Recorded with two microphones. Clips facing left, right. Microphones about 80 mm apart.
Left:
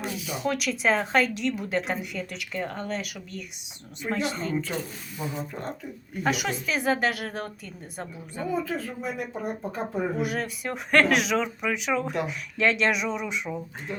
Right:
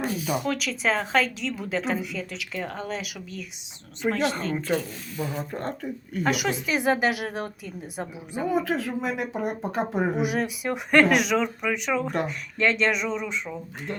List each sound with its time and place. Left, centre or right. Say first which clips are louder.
0.1 s a sound: right 6 dB; right
0.4 s speech: left 1 dB; centre
4.2 s speech: right 2 dB; right
5.5 s speech: right 4 dB; right
6.2 s a woman's voice: right 1 dB; centre
8.4 s speech: right 4 dB; right
10.2 s speech: right 3 dB; centre